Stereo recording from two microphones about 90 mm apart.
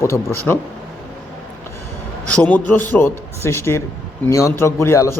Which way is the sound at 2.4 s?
15° left (ahead or behind).